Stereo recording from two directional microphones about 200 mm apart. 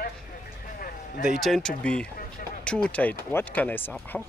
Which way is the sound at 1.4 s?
Centre (ahead or behind).